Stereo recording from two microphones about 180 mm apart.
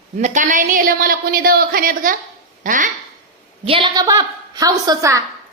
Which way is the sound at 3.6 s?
30° right (ahead or behind).